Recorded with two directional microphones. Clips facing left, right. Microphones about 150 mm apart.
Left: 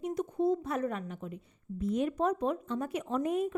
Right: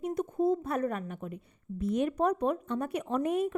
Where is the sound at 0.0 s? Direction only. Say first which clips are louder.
Right 1 dB; 55° right (ahead or behind).